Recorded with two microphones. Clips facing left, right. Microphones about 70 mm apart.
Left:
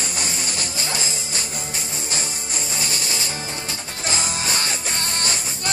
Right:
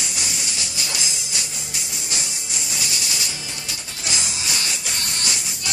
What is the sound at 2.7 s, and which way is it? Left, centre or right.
Music, left.